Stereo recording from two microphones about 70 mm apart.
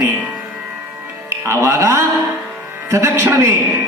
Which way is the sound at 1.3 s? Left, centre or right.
Right.